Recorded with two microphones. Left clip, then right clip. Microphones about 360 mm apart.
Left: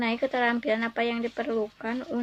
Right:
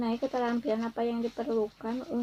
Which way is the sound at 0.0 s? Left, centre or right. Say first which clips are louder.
Left 5 dB; left.